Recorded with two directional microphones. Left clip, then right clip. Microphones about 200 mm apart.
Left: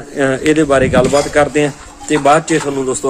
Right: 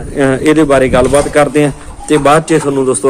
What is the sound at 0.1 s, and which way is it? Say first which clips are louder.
A man's voice: right 3 dB; centre (ahead or behind).